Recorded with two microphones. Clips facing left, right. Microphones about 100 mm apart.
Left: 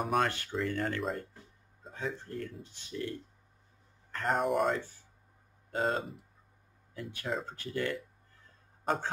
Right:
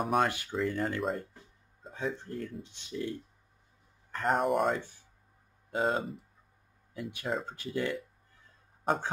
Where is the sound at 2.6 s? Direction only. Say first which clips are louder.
Right 2 dB; 20° right (ahead or behind).